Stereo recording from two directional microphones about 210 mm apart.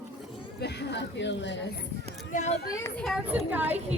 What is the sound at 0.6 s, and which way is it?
Speech, 55° left (ahead or behind).